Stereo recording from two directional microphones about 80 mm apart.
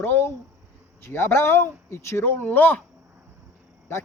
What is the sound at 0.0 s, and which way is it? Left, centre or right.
A man's voice, left.